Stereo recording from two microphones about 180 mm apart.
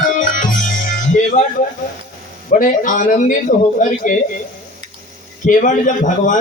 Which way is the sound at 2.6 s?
45° left (ahead or behind).